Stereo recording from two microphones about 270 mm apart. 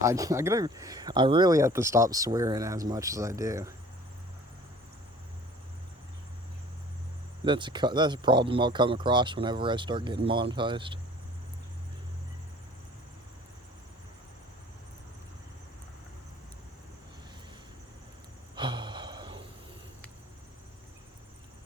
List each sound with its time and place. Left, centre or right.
0.0 s speech: centre
7.4 s speech: centre
18.5 s sigh: centre